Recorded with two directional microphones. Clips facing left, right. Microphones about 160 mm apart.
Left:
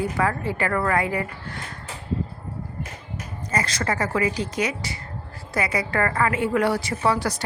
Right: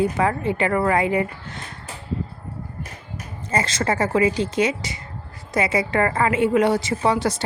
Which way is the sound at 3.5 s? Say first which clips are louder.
Right 3 dB; 25° right (ahead or behind).